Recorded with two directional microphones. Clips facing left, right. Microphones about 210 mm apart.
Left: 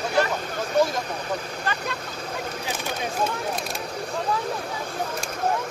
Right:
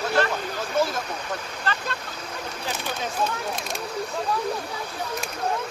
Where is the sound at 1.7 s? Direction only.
15° left (ahead or behind).